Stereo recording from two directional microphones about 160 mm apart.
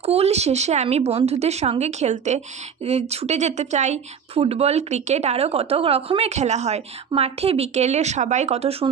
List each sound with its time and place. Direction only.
0.0 s speech: 40° right (ahead or behind)